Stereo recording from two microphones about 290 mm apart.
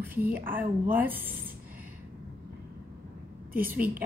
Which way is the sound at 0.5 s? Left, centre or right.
Centre.